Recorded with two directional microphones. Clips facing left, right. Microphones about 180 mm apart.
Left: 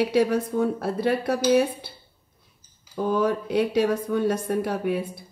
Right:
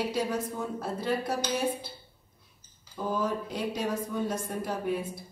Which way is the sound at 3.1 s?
65° left (ahead or behind).